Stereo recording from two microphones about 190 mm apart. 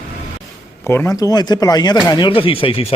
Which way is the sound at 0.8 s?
15° left (ahead or behind).